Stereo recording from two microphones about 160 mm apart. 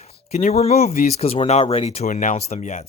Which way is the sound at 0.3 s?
45° left (ahead or behind).